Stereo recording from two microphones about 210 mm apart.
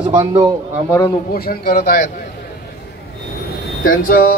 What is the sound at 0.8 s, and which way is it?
Speech, 10° left (ahead or behind).